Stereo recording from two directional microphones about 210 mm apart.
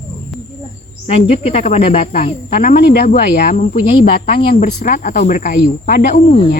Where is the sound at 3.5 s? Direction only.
35° left (ahead or behind).